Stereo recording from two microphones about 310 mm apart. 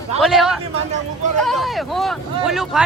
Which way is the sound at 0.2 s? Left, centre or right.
Centre.